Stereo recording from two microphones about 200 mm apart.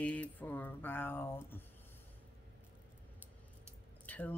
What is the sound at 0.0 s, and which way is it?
Speech, 5° left (ahead or behind).